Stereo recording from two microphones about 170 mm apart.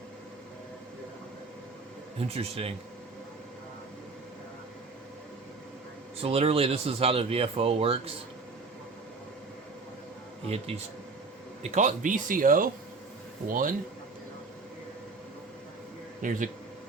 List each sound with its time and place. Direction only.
2.1 s speech: 35° right (ahead or behind)
6.1 s speech: 35° right (ahead or behind)
10.4 s speech: 35° right (ahead or behind); by 13.7 s 55° right (ahead or behind)
16.2 s speech: 50° right (ahead or behind)